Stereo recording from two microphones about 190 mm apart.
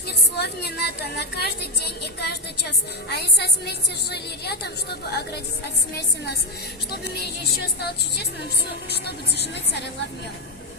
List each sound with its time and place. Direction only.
0.3 s a woman's voice: 60° left (ahead or behind)
6.9 s a woman's voice: 60° left (ahead or behind)